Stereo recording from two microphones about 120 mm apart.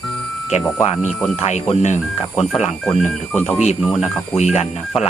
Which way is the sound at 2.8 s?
5° left (ahead or behind).